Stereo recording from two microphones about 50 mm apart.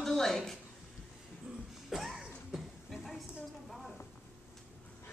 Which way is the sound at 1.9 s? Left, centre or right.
Centre.